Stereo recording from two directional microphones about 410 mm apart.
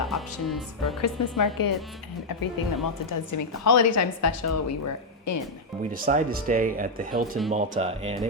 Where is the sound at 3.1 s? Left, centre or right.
Left.